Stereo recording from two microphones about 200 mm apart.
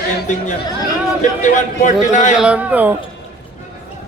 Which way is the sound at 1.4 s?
40° left (ahead or behind).